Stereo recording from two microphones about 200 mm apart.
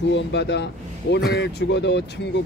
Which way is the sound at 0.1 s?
60° left (ahead or behind).